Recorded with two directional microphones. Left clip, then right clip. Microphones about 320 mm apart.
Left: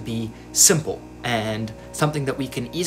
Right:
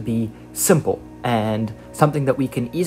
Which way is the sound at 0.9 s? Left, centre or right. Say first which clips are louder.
Right 6 dB; right.